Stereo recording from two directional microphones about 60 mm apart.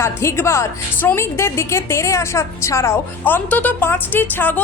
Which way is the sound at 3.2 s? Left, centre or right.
Left.